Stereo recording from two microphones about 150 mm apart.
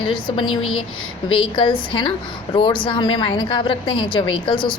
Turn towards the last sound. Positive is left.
turn(degrees=30)  # may be behind; listen again after turning